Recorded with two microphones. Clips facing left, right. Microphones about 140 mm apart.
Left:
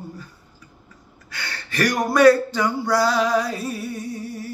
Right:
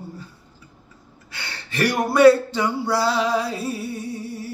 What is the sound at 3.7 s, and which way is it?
Music, 30° right (ahead or behind).